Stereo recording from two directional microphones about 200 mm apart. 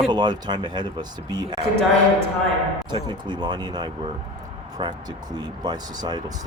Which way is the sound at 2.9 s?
20° right (ahead or behind).